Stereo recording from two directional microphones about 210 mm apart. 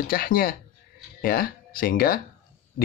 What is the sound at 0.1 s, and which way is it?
Speech, 45° left (ahead or behind).